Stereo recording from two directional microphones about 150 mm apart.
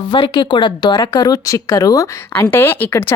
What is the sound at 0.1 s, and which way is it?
A woman's voice, 30° left (ahead or behind).